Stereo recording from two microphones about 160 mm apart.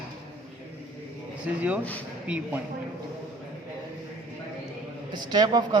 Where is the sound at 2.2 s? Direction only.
5° right (ahead or behind).